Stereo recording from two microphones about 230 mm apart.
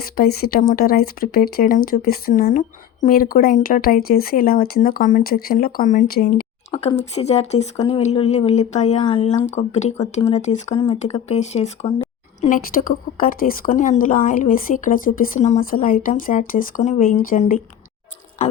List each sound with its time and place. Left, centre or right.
0.0 s speech: left
6.8 s speech: left
12.5 s speech: left